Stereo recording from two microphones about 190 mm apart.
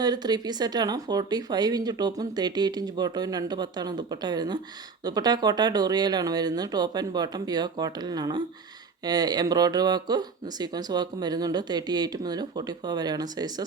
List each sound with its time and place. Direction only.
0.0 s speech: 20° right (ahead or behind)